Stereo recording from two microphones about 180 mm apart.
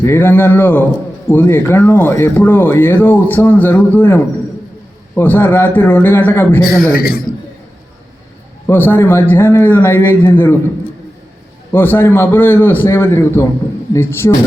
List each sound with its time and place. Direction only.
0.0 s speech: 10° left (ahead or behind)
6.9 s a man's voice: 55° left (ahead or behind)
8.6 s speech: 10° left (ahead or behind)
11.7 s speech: 10° left (ahead or behind)